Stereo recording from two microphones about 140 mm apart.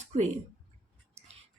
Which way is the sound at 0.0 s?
55° right (ahead or behind).